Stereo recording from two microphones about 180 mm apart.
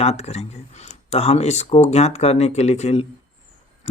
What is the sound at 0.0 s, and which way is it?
Speech, 35° left (ahead or behind).